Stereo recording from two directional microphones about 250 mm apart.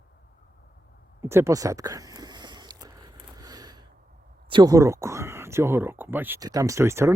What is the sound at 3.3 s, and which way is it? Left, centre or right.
Gasp, centre.